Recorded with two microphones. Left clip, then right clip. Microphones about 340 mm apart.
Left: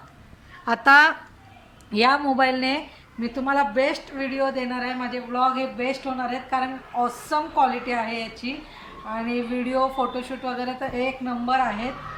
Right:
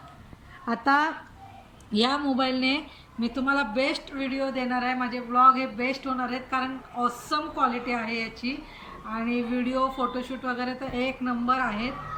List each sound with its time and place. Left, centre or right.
0.6 s a woman's voice: left
1.9 s speech: left
2.6 s speech: centre